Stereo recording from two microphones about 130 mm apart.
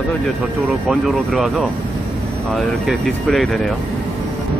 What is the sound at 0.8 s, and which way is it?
Speech, centre (ahead or behind).